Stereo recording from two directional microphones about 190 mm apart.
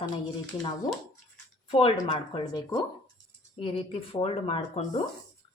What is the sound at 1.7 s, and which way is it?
Speech, 30° left (ahead or behind).